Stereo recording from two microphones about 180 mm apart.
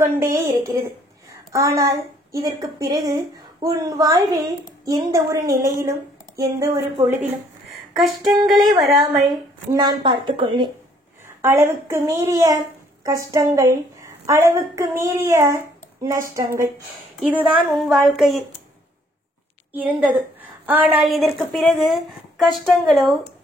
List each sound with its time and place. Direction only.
0.0 s a woman's voice: 15° right (ahead or behind)
7.7 s a sound: centre (ahead or behind)
8.8 s a woman's voice: centre (ahead or behind)
9.7 s a woman's voice: 25° right (ahead or behind)
11.2 s a woman's voice: 15° right (ahead or behind)
17.3 s a woman's voice: 5° right (ahead or behind)
19.7 s a woman's voice: 10° right (ahead or behind)